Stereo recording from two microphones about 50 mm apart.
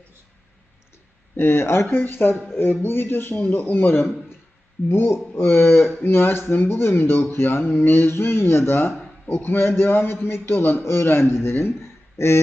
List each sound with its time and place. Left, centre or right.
1.4 s a man's voice: left